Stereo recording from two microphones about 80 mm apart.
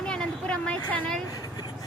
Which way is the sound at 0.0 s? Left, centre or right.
Centre.